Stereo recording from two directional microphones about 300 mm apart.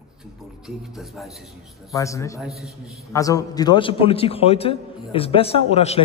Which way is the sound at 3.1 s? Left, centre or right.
Centre.